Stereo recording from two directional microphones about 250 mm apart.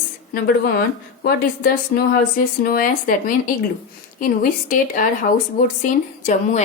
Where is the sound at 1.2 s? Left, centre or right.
Left.